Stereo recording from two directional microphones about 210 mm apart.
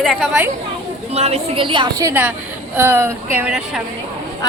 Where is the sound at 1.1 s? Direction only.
30° right (ahead or behind); by 3.8 s 5° right (ahead or behind).